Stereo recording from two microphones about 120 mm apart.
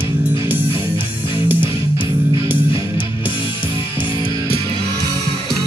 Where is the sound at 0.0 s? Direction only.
15° right (ahead or behind).